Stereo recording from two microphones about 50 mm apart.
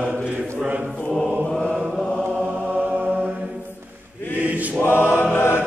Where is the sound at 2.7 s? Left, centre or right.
Right.